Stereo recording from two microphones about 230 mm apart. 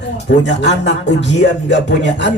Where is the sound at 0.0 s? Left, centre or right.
Left.